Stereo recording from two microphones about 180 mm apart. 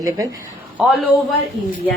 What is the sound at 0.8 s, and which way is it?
Speech, 5° right (ahead or behind).